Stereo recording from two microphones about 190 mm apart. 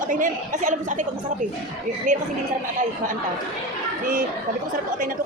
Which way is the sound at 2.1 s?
40° right (ahead or behind).